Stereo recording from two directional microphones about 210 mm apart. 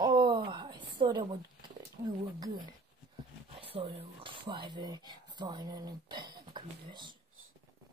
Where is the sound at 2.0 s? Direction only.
25° right (ahead or behind).